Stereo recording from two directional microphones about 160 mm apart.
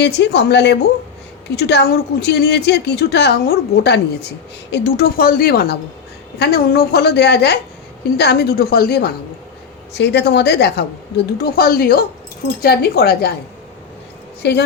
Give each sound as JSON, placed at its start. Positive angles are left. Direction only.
{"t": 0.0, "sound": "a woman's voice", "side_deg": 90}
{"t": 9.9, "sound": "a woman's voice", "side_deg": 90}
{"t": 11.3, "sound": "a woman's voice", "side_deg": 70}
{"t": 12.6, "sound": "speech", "side_deg": 80}
{"t": 14.4, "sound": "a woman's voice", "side_deg": 90}